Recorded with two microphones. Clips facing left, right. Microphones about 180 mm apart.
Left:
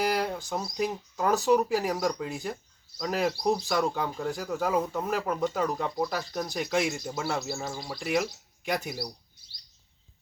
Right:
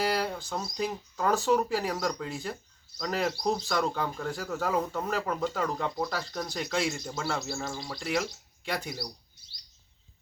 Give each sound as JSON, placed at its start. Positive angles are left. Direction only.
{"t": 0.0, "sound": "a sound", "side_deg": 15}
{"t": 0.8, "sound": "speech", "side_deg": 10}
{"t": 3.0, "sound": "speech", "side_deg": 5}
{"t": 5.4, "sound": "speech", "side_deg": 15}
{"t": 7.3, "sound": "speech", "side_deg": 0}